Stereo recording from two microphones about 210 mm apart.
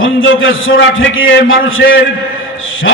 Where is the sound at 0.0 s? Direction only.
70° left (ahead or behind).